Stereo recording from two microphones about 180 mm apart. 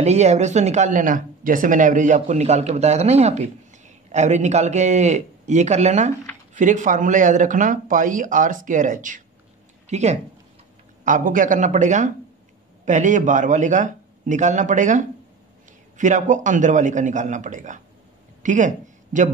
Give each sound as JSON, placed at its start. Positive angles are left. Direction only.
{"t": 0.0, "sound": "speech", "side_deg": -40}